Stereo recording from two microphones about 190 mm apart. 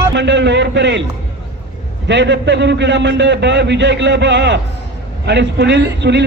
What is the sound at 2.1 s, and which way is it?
A man's voice, 65° right (ahead or behind).